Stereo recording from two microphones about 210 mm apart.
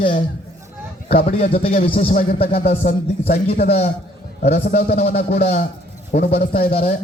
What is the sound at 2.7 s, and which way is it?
A man's voice, 45° left (ahead or behind).